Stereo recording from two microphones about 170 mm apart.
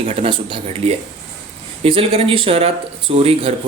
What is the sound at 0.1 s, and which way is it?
Speech, 30° right (ahead or behind).